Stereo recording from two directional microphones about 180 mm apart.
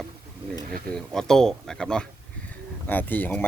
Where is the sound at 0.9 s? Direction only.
5° left (ahead or behind).